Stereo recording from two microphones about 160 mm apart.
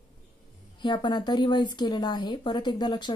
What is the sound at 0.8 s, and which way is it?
Speech, 30° left (ahead or behind).